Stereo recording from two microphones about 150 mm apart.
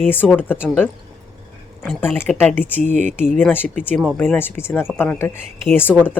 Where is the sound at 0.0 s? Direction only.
10° left (ahead or behind).